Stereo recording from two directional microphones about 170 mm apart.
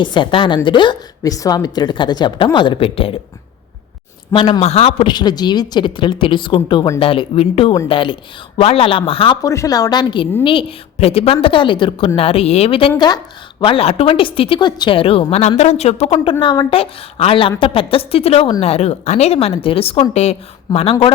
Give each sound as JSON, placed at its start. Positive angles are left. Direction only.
{"t": 0.0, "sound": "a woman's voice", "side_deg": 25}
{"t": 4.3, "sound": "a woman's voice", "side_deg": 25}
{"t": 16.4, "sound": "a woman's voice", "side_deg": 30}
{"t": 20.7, "sound": "a woman's voice", "side_deg": 25}